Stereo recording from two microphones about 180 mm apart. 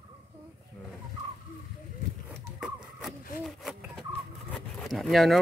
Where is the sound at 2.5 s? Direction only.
5° right (ahead or behind).